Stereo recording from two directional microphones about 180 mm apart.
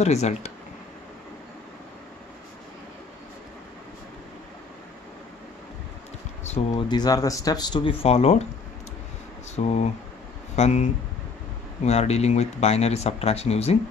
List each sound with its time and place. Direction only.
0.0 s speech: 40° left (ahead or behind)
6.7 s speech: 25° left (ahead or behind)
9.6 s speech: 40° left (ahead or behind)